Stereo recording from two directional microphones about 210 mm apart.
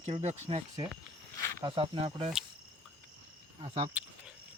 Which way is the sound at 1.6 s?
25° right (ahead or behind).